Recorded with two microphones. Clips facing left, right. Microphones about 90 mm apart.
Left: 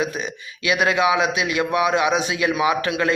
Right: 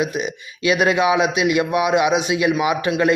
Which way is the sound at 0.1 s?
20° right (ahead or behind).